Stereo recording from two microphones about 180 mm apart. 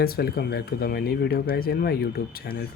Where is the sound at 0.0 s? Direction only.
60° left (ahead or behind).